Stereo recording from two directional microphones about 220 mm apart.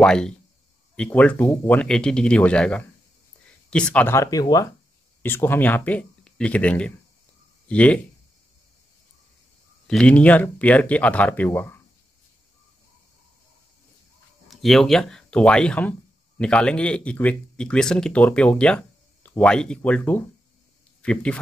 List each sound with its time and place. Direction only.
0.0 s speech: 5° left (ahead or behind)
9.8 s speech: 5° left (ahead or behind)
14.5 s speech: centre (ahead or behind)